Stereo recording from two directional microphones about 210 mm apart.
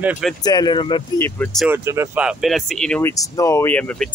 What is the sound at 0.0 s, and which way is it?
Speech, 5° right (ahead or behind).